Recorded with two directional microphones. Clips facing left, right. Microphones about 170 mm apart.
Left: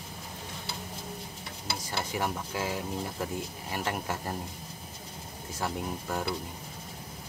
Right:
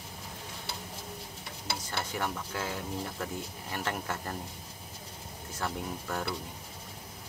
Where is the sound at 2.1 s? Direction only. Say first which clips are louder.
Left 3 dB; 15° left (ahead or behind).